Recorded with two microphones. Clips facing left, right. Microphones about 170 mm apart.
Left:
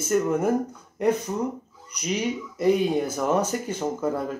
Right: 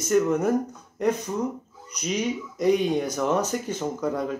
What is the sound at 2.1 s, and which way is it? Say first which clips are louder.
Speech: even; 5° left (ahead or behind).